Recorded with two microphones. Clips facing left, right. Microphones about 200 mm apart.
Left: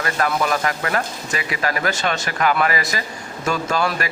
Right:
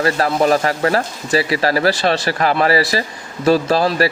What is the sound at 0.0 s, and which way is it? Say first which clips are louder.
A man's voice: right 6 dB; 30° right (ahead or behind).